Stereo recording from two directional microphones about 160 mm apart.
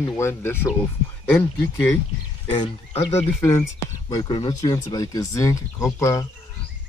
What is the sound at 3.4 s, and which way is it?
Speech, 15° left (ahead or behind).